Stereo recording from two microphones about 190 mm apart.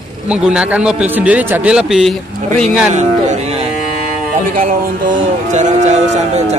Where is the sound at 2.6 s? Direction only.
40° right (ahead or behind).